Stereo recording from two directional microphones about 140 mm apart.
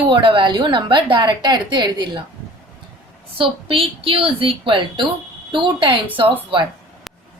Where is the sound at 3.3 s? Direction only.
40° right (ahead or behind).